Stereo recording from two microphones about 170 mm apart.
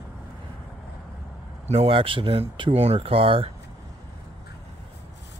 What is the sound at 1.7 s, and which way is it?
Speech, 35° right (ahead or behind).